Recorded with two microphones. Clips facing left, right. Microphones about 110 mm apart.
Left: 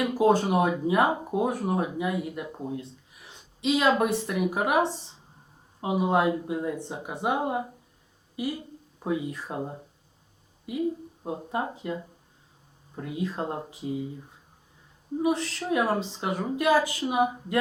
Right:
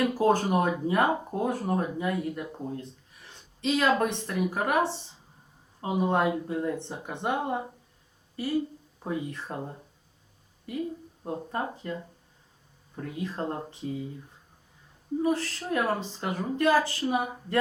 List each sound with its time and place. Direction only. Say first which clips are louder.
0.1 s speech: left 2 dB; 15° left (ahead or behind)
5.9 s speech: left 2 dB; 10° left (ahead or behind)
15.2 s a woman's voice: left 2 dB; 20° left (ahead or behind)